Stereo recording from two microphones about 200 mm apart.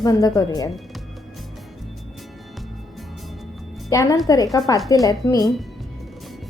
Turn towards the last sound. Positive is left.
turn(degrees=15)  # may be behind; listen again after turning